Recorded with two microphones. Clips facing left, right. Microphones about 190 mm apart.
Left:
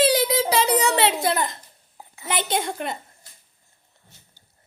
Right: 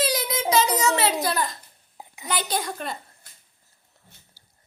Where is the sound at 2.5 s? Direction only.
25° left (ahead or behind).